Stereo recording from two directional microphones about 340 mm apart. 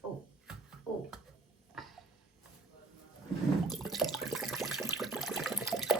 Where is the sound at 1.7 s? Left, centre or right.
Centre.